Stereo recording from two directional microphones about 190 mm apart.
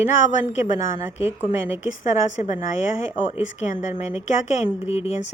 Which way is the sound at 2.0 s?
40° left (ahead or behind).